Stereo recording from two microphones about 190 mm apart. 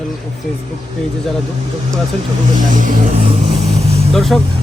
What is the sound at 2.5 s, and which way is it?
Speech, 45° right (ahead or behind).